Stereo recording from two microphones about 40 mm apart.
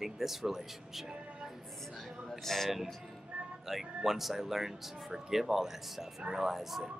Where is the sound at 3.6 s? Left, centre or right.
Centre.